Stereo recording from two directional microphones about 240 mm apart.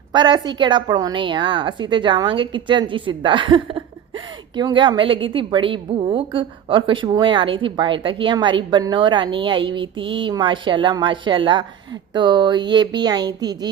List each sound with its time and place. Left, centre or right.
0.1 s a woman's voice: centre